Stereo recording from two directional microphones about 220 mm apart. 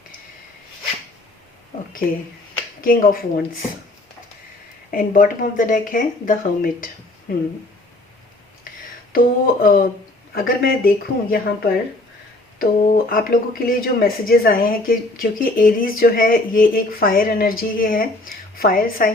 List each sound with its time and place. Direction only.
2.8 s speech: 40° left (ahead or behind)
4.9 s speech: 40° left (ahead or behind)
9.1 s speech: 40° left (ahead or behind)